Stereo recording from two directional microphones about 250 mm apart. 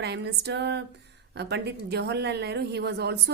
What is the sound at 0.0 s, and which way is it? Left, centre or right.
A woman's voice, right.